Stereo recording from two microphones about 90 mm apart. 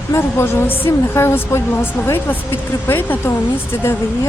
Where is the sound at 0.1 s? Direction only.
30° left (ahead or behind).